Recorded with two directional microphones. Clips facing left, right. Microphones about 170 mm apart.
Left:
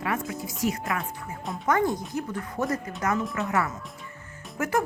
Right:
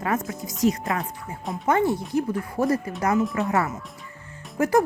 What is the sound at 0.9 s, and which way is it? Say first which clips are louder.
Speech: right 3 dB; 30° right (ahead or behind).